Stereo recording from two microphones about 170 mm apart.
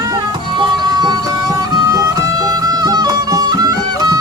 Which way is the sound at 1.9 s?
20° right (ahead or behind).